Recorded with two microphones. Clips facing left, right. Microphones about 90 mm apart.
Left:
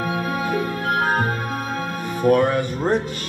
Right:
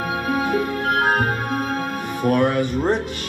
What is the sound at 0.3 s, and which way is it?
Music, 45° right (ahead or behind).